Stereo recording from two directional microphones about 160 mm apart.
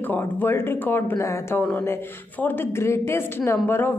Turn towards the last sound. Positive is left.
turn(degrees=15)  # may be behind; listen again after turning